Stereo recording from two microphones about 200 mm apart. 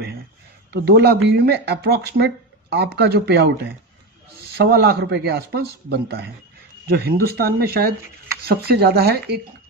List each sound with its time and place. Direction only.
0.8 s speech: 60° right (ahead or behind)